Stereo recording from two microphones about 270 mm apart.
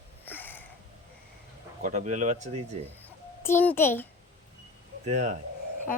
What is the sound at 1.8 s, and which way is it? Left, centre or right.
Speech, right.